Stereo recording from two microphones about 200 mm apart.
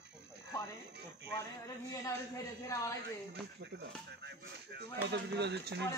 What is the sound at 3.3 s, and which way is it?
Speech, 60° right (ahead or behind).